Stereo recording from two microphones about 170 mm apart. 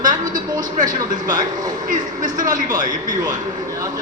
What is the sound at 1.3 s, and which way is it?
A man's voice, 25° right (ahead or behind).